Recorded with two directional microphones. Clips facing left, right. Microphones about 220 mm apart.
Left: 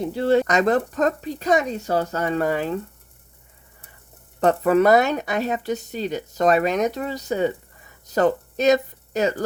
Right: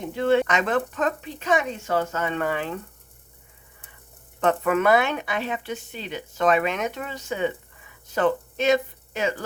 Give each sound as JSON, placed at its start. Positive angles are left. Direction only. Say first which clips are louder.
{"t": 0.0, "sound": "speech", "louder": "left 2 dB", "side_deg": 35}
{"t": 4.4, "sound": "speech", "louder": "left 5 dB", "side_deg": 35}